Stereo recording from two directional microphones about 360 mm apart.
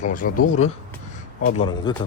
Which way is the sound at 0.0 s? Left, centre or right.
Left.